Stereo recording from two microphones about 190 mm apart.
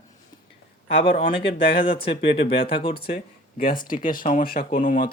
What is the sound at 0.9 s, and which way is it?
Speech, 30° left (ahead or behind).